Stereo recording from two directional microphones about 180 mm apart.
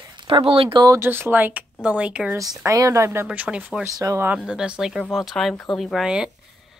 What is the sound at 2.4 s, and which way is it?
Speech, 20° right (ahead or behind).